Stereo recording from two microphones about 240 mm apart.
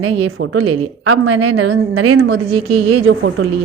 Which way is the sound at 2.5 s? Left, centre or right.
Right.